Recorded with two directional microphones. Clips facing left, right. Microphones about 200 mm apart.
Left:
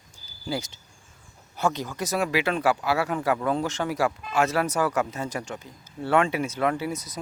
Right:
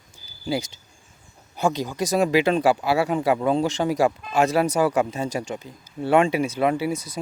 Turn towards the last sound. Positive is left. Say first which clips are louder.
# right 4 dB
turn(degrees=-10)  # may be behind; listen again after turning